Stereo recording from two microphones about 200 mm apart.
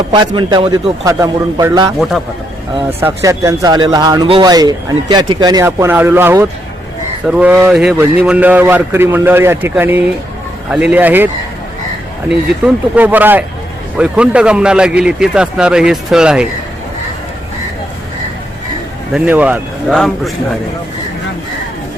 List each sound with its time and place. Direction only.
0.1 s a man's voice: 20° right (ahead or behind)
3.0 s speech: 15° right (ahead or behind)
12.3 s a man's voice: 5° right (ahead or behind)
19.1 s a man's voice: 10° right (ahead or behind)